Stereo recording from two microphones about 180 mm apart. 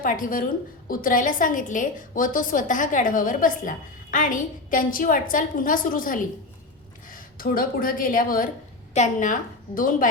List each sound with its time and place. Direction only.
0.0 s a woman's voice: 50° left (ahead or behind)